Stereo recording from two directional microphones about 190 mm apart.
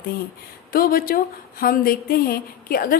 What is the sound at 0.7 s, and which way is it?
Speech, 50° left (ahead or behind).